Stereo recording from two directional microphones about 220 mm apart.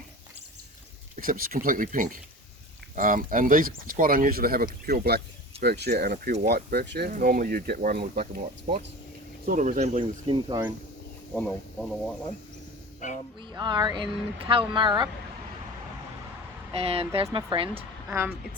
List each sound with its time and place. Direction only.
1.1 s speech: 40° right (ahead or behind); by 10.6 s 25° right (ahead or behind)
11.3 s speech: 5° left (ahead or behind)
13.0 s speech: 35° left (ahead or behind)
13.4 s speech: 20° right (ahead or behind)
16.7 s speech: 25° right (ahead or behind)
18.1 s a woman's voice: 10° right (ahead or behind)